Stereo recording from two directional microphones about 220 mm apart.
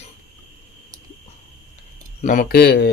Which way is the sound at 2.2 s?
35° left (ahead or behind).